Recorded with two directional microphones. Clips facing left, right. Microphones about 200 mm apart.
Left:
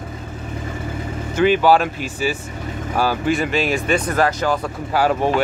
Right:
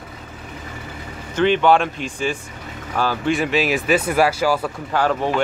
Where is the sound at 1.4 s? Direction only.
5° left (ahead or behind).